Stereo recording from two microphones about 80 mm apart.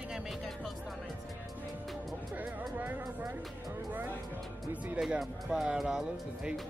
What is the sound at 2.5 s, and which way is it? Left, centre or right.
Speech, right.